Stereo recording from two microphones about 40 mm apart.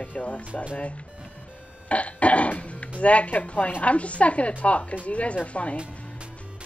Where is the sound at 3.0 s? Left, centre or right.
Left.